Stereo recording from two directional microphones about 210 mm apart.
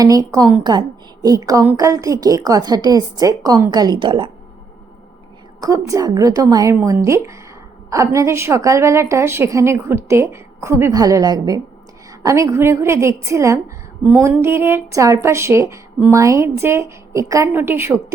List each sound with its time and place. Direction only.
0.0 s a woman's voice: 15° right (ahead or behind)
5.5 s a woman's voice: 15° right (ahead or behind)